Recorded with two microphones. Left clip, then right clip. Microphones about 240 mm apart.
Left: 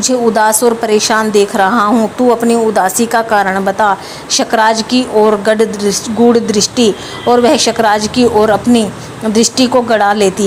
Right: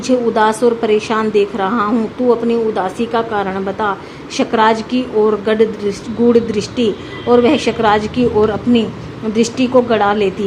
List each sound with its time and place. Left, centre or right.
0.0 s a woman's voice: centre